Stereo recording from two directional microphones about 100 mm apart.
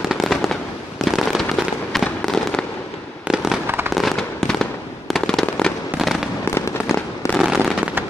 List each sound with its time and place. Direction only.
0.1 s fireworks: centre (ahead or behind)
3.6 s fireworks: 20° right (ahead or behind)
3.9 s fireworks: centre (ahead or behind)
6.5 s fireworks: 30° left (ahead or behind)
7.3 s fireworks: 5° right (ahead or behind)